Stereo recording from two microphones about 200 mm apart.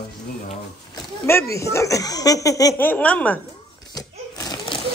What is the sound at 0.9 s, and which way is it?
Speech, 15° left (ahead or behind).